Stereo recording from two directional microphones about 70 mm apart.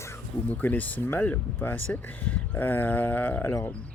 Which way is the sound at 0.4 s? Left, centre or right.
Left.